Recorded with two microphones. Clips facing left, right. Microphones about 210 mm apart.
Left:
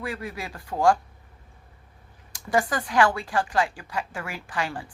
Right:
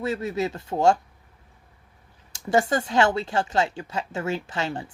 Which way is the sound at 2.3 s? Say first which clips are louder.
Right 3 dB; 25° right (ahead or behind).